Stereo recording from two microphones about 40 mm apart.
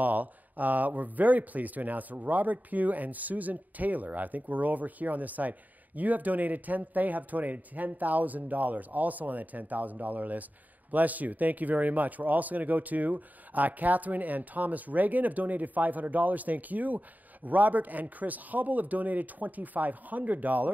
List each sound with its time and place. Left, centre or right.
0.0 s speech: right